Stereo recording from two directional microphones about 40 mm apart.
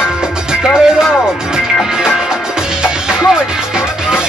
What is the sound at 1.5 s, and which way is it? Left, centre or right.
Music, centre.